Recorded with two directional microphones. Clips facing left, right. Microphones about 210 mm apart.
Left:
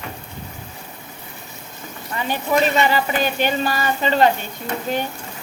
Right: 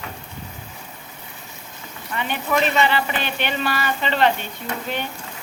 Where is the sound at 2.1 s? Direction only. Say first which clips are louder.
Left 3 dB; 35° left (ahead or behind).